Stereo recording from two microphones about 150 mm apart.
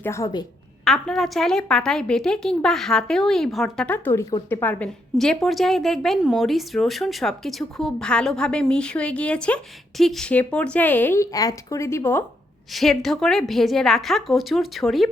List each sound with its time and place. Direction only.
0.0 s a woman's voice: 20° left (ahead or behind)
0.9 s a woman's voice: centre (ahead or behind)
3.8 s a woman's voice: 10° left (ahead or behind)
12.7 s a woman's voice: centre (ahead or behind)